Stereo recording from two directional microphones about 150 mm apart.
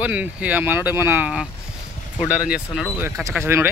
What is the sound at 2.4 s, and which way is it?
Speech, 5° right (ahead or behind).